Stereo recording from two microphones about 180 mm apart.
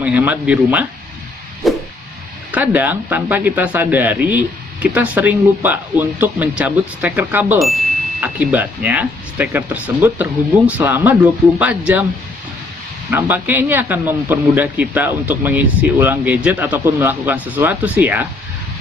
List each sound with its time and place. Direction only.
0.0 s speech: 10° right (ahead or behind)
1.6 s a sound: centre (ahead or behind)
2.5 s speech: 10° right (ahead or behind)
13.1 s speech: 10° right (ahead or behind)